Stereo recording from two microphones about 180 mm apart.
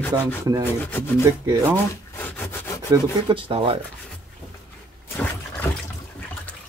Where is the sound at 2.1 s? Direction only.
10° left (ahead or behind).